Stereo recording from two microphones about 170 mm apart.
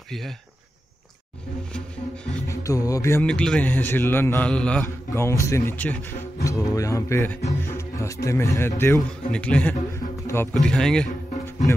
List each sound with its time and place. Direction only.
2.4 s a man's voice: 20° left (ahead or behind)
3.3 s a man's voice: 5° left (ahead or behind)
10.2 s music: 15° left (ahead or behind)
10.5 s a man's voice: 5° left (ahead or behind)